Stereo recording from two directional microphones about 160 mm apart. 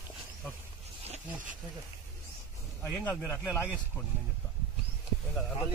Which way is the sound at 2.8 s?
10° left (ahead or behind).